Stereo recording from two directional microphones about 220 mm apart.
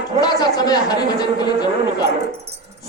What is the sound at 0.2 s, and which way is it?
Speech, 20° left (ahead or behind).